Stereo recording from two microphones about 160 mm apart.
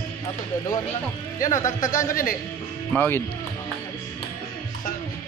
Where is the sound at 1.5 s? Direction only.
20° left (ahead or behind).